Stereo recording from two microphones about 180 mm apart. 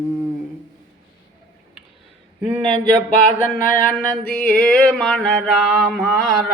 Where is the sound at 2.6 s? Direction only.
45° left (ahead or behind).